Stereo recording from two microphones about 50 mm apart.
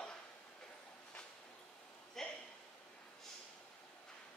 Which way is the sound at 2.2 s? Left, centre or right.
Centre.